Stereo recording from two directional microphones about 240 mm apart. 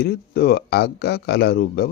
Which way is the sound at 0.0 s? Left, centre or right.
Left.